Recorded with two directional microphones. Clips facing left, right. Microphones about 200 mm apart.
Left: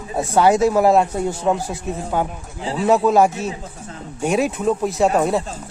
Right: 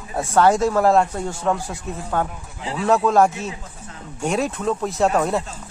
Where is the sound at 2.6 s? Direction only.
30° left (ahead or behind).